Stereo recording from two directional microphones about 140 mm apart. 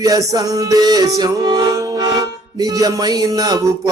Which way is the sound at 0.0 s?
25° right (ahead or behind).